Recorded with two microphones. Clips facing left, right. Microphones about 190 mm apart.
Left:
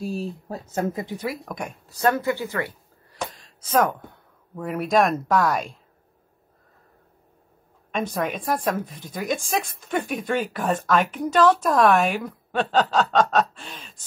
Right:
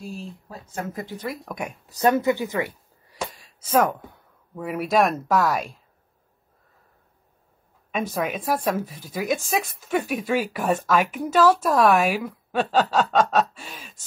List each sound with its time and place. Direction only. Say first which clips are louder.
0.5 s speech: left 6 dB; 40° left (ahead or behind)
0.9 s speech: left 2 dB; 20° left (ahead or behind)
1.2 s speech: left 1 dB; centre (ahead or behind)
1.9 s speech: right 2 dB; 20° right (ahead or behind); by 5.8 s centre (ahead or behind)
7.9 s speech: even; 5° right (ahead or behind)